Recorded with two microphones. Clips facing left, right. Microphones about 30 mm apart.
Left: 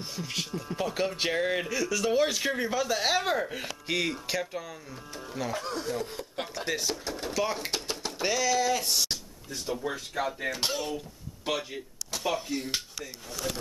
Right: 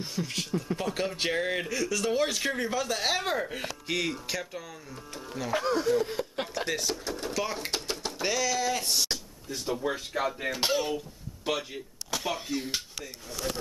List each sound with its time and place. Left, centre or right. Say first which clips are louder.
0.0 s speech: right 1 dB; centre
5.6 s speech: right 7 dB; centre
6.0 s speech: right 4 dB; centre
6.4 s speech: left 2 dB; centre
11.4 s speech: even; centre